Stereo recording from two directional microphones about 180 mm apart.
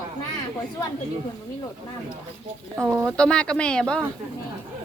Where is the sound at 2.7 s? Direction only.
15° right (ahead or behind).